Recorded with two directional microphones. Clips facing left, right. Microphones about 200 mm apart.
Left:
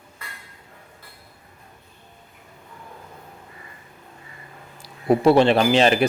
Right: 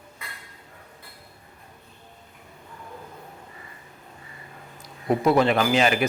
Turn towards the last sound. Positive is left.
turn(degrees=30)  # may be behind; listen again after turning